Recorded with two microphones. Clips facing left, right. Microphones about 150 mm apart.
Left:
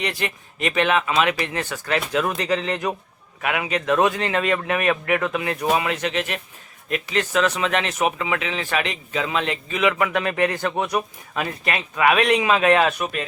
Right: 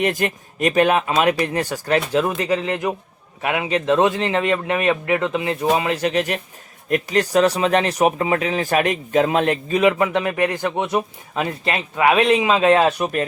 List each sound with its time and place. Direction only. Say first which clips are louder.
0.0 s speech: right 6 dB; 45° right (ahead or behind)
2.4 s speech: right 2 dB; 20° right (ahead or behind); by 9.9 s 40° right (ahead or behind)
9.9 s speech: right 3 dB; 25° right (ahead or behind)